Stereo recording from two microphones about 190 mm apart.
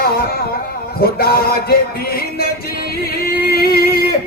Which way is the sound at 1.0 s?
50° left (ahead or behind).